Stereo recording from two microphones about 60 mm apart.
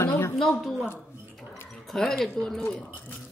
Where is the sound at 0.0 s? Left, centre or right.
Left.